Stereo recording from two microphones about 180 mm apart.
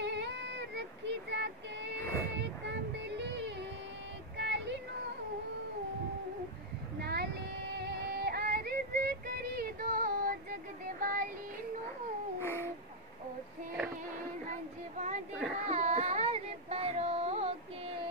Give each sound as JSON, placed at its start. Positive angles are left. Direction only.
{"t": 0.0, "sound": "female singing", "side_deg": -75}
{"t": 2.0, "sound": "music", "side_deg": 10}
{"t": 2.3, "sound": "music", "side_deg": -75}
{"t": 4.4, "sound": "a sound", "side_deg": -75}
{"t": 7.0, "sound": "child singing", "side_deg": -65}
{"t": 7.8, "sound": "music", "side_deg": -60}
{"t": 12.4, "sound": "a sound", "side_deg": 15}
{"t": 15.0, "sound": "child singing", "side_deg": -40}
{"t": 15.6, "sound": "a sound", "side_deg": -40}